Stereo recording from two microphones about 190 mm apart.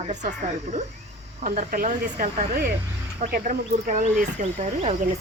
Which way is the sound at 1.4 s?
45° right (ahead or behind).